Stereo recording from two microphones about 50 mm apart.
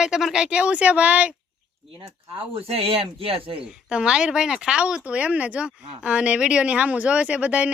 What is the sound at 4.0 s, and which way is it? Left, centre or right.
Speech, centre.